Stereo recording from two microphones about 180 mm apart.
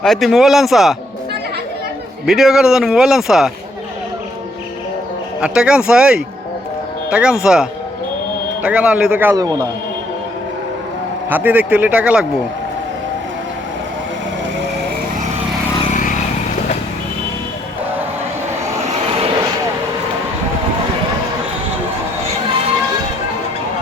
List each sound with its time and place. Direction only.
0.0 s a man's voice: centre (ahead or behind)
2.2 s a man's voice: centre (ahead or behind)
5.4 s a man's voice: 5° right (ahead or behind)
11.3 s a man's voice: 10° right (ahead or behind)
15.9 s vehicle: 45° left (ahead or behind)